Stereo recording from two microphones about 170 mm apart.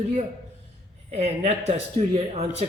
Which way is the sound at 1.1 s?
40° right (ahead or behind).